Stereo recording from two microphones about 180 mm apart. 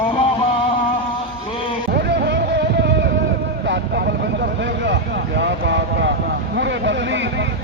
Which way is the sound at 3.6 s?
75° right (ahead or behind).